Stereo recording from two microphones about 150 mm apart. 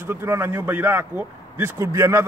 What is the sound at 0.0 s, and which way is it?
A man's voice, 15° right (ahead or behind).